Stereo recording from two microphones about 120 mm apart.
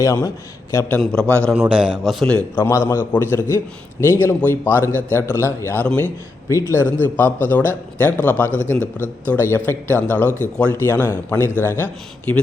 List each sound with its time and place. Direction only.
0.0 s a man's voice: 25° left (ahead or behind)
1.0 s a man's voice: 5° left (ahead or behind)
1.5 s a man's voice: 10° right (ahead or behind)
2.6 s a man's voice: 20° left (ahead or behind)
6.5 s a man's voice: 25° left (ahead or behind)